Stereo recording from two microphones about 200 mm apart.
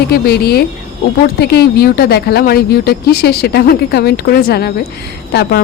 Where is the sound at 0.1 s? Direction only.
50° left (ahead or behind).